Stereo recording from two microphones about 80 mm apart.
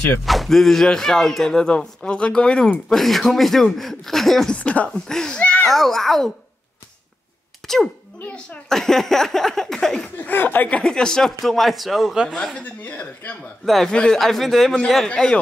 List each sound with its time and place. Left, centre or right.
0.2 s speech: centre
4.6 s speech: centre
5.7 s speech: centre
7.6 s speech: centre
10.2 s speech: left; by 12.2 s centre
12.5 s speech: centre